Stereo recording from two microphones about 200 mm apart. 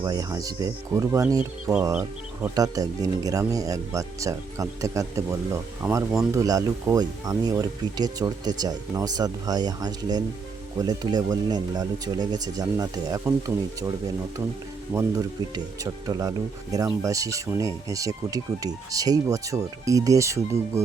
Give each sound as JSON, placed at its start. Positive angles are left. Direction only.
{"t": 0.0, "sound": "speech", "side_deg": -15}
{"t": 14.9, "sound": "speech", "side_deg": -15}